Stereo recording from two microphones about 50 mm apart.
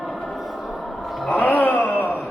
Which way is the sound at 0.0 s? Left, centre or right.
Centre.